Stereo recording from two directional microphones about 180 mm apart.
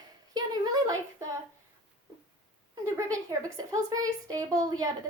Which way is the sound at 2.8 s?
20° right (ahead or behind).